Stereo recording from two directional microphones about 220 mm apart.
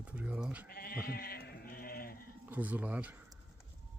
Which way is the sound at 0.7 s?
45° left (ahead or behind).